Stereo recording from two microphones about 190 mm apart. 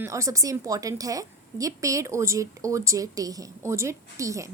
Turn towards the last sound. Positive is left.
turn(degrees=-15)  # may be behind; listen again after turning